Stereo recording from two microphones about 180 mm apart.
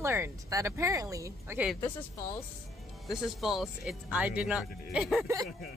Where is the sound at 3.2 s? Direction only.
Centre (ahead or behind).